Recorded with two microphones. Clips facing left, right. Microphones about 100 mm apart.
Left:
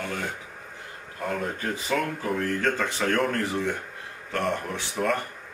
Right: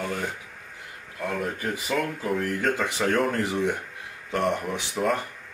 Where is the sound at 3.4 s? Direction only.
15° right (ahead or behind).